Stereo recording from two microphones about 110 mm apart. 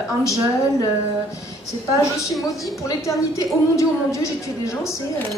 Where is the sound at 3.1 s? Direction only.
30° left (ahead or behind).